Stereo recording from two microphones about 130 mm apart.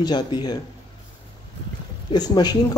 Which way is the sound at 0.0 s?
35° left (ahead or behind).